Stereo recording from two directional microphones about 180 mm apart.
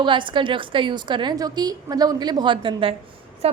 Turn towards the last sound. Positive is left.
turn(degrees=-35)  # may be behind; listen again after turning